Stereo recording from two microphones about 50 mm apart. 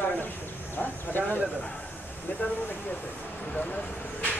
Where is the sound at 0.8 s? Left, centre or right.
Left.